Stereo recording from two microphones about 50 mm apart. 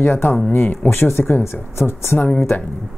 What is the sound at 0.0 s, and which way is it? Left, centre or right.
Speech, left.